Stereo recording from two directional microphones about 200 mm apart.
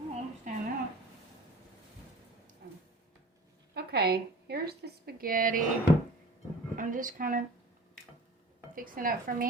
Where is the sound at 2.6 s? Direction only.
55° right (ahead or behind).